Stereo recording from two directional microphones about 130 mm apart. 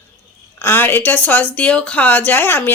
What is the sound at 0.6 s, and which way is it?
Speech, 15° left (ahead or behind).